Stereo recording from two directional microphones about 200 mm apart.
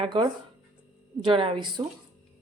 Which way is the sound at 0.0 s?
25° right (ahead or behind).